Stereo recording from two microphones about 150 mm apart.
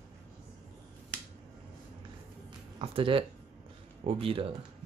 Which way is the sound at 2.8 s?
35° right (ahead or behind).